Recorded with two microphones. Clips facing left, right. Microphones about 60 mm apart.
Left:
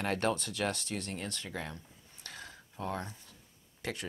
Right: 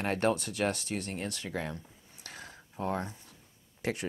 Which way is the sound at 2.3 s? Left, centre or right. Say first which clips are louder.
Right 1 dB; centre.